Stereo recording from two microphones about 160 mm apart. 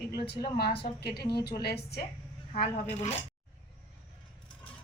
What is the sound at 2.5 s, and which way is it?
Speech, 35° left (ahead or behind).